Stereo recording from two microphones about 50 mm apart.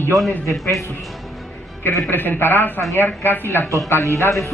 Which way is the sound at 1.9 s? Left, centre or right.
Left.